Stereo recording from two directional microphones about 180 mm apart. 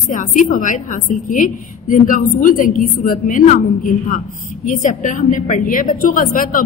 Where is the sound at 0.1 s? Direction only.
45° left (ahead or behind).